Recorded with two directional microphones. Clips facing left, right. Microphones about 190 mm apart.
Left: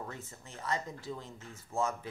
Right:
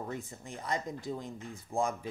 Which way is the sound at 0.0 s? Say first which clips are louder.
Right 5 dB; 15° right (ahead or behind).